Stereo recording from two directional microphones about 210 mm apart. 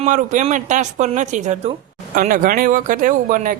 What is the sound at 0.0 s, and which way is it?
Speech, 35° right (ahead or behind).